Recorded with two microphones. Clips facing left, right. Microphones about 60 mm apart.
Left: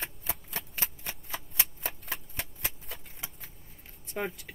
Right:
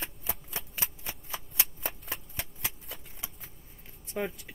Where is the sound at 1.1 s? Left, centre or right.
Centre.